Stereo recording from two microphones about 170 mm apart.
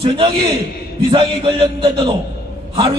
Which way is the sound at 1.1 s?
30° right (ahead or behind).